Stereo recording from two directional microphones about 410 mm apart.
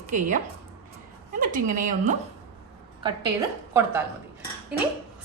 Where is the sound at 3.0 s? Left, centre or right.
Centre.